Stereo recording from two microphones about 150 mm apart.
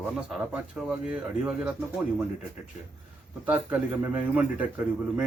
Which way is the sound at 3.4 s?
10° right (ahead or behind).